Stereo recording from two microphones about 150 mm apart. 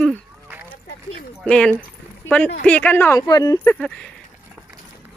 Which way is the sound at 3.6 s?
10° left (ahead or behind).